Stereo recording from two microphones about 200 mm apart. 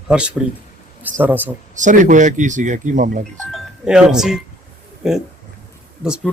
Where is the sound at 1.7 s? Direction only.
40° right (ahead or behind).